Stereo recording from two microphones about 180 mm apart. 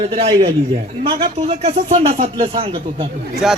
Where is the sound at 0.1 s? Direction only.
30° right (ahead or behind).